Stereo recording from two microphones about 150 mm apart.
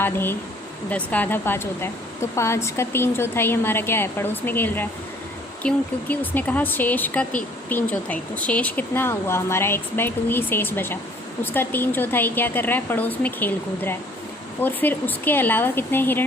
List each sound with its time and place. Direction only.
0.0 s a woman's voice: 15° left (ahead or behind)